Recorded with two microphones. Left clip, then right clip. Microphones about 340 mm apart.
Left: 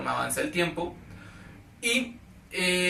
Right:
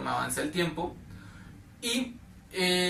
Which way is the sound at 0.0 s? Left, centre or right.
Centre.